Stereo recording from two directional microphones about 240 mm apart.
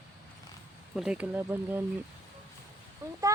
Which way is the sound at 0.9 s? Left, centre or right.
Centre.